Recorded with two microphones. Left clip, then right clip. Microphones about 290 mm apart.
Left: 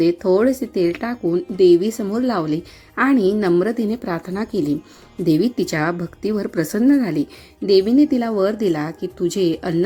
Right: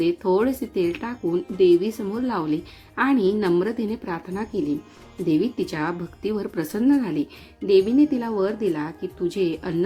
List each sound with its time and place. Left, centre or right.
0.0 s a woman's voice: centre